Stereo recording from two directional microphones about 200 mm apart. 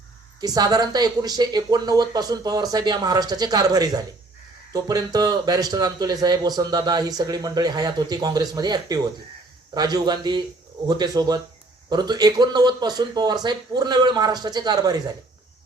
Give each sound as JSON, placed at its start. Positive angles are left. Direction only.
{"t": 0.4, "sound": "speech", "side_deg": -20}